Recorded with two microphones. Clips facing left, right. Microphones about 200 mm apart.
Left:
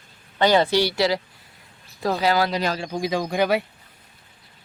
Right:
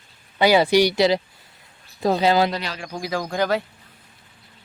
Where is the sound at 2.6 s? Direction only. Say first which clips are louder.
Left 7 dB; 45° left (ahead or behind).